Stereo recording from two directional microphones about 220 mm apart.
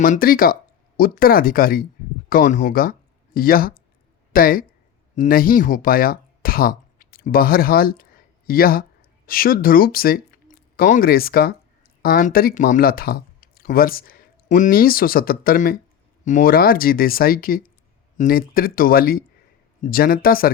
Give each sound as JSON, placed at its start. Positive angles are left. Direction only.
{"t": 0.0, "sound": "speech", "side_deg": 40}